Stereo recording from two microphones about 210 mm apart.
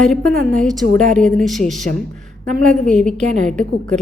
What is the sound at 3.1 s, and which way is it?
Speech, 35° right (ahead or behind).